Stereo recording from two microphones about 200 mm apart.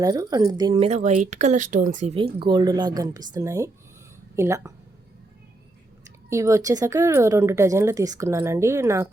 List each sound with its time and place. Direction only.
0.0 s a woman's voice: 15° right (ahead or behind)
6.1 s speech: 15° right (ahead or behind)